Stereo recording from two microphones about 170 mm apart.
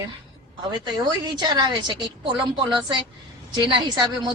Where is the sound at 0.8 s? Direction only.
25° right (ahead or behind).